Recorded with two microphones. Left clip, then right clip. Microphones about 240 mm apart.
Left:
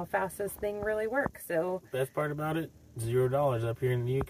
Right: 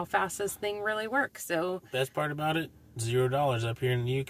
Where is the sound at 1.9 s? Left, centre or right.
Right.